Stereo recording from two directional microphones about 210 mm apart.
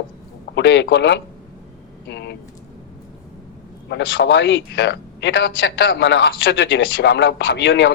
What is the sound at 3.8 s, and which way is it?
A man's voice, 60° left (ahead or behind).